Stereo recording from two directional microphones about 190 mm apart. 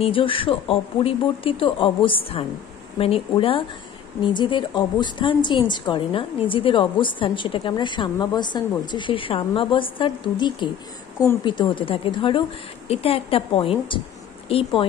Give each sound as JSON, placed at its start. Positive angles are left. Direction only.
{"t": 0.0, "sound": "a woman's voice", "side_deg": 25}